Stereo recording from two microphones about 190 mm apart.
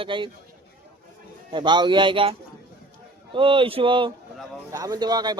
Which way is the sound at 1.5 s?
25° right (ahead or behind).